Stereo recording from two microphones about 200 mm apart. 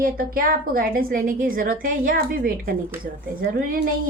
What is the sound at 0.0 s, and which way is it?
A woman's voice, 45° right (ahead or behind).